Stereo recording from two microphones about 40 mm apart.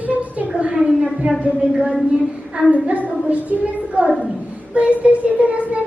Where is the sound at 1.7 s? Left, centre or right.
Right.